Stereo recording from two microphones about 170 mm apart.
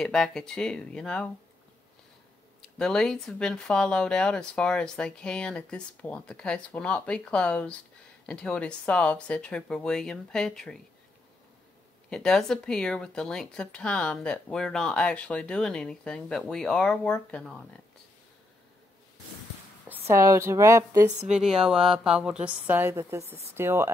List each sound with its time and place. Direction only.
0.0 s speech: 5° left (ahead or behind)
2.8 s speech: 5° left (ahead or behind)
12.1 s speech: 5° left (ahead or behind)
20.1 s speech: 20° right (ahead or behind)
21.3 s speech: centre (ahead or behind)